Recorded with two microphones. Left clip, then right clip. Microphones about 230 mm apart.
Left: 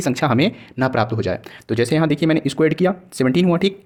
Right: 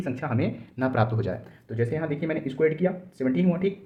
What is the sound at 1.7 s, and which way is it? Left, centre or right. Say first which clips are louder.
Speech: left 10 dB; left.